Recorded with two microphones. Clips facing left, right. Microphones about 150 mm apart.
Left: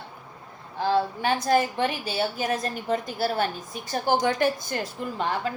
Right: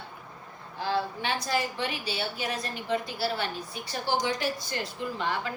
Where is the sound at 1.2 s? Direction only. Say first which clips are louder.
Left 7 dB; 50° left (ahead or behind).